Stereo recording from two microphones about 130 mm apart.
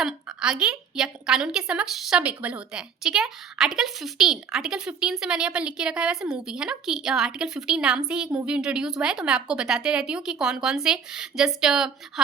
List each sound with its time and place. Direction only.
0.0 s a woman's voice: 5° right (ahead or behind)